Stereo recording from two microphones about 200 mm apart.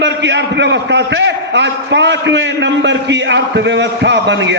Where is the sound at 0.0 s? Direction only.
60° right (ahead or behind).